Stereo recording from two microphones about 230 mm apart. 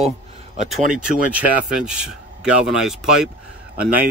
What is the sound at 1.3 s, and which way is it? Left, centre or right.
Speech, centre.